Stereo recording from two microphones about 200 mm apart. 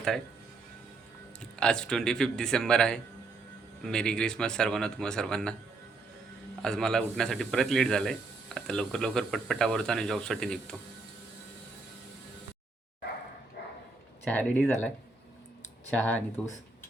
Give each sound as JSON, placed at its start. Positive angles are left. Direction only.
{"t": 1.5, "sound": "speech", "side_deg": 5}
{"t": 6.6, "sound": "speech", "side_deg": 5}
{"t": 13.6, "sound": "dog", "side_deg": 55}
{"t": 14.3, "sound": "speech", "side_deg": 10}
{"t": 16.0, "sound": "speech", "side_deg": 5}